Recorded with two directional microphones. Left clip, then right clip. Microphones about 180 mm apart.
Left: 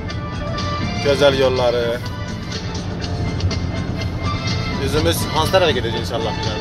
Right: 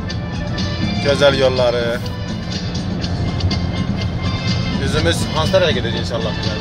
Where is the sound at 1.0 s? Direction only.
Centre (ahead or behind).